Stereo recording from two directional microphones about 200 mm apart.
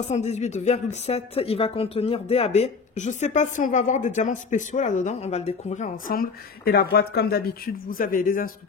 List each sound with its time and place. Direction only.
0.1 s speech: 35° left (ahead or behind)